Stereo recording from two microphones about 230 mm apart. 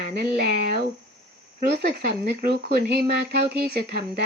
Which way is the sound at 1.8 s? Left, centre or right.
Right.